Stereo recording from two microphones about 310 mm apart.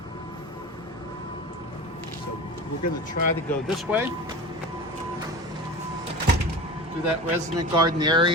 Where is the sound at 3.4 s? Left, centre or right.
Centre.